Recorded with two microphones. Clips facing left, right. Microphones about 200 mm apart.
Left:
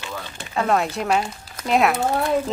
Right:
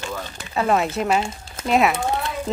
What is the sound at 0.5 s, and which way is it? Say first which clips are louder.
Speech: right 1 dB; 5° right (ahead or behind).